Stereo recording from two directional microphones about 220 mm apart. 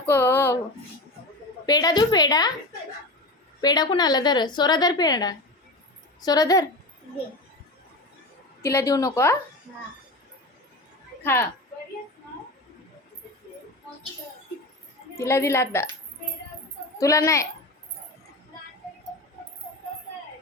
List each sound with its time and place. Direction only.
0.0 s a sound: 10° left (ahead or behind)
1.6 s a woman's voice: 15° left (ahead or behind)
3.6 s a woman's voice: 20° left (ahead or behind)
8.6 s a woman's voice: 15° left (ahead or behind)
11.2 s a woman's voice: 10° left (ahead or behind)
15.2 s a woman's voice: 10° left (ahead or behind)
17.0 s a woman's voice: 15° left (ahead or behind)